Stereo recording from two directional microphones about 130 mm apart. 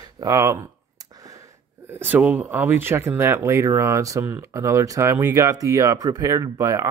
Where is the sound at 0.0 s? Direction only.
30° right (ahead or behind).